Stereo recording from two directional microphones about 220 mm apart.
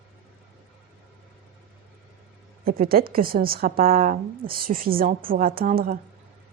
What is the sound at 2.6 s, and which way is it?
A woman's voice, 40° right (ahead or behind).